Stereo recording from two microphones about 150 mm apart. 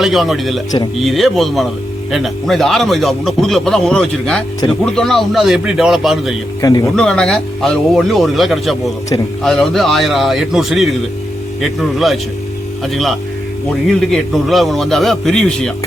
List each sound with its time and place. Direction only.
0.0 s a man's voice: centre (ahead or behind)
6.6 s speech: 25° left (ahead or behind)
6.9 s a man's voice: 5° left (ahead or behind)